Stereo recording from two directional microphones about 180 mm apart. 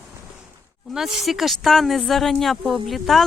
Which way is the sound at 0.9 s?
Centre (ahead or behind).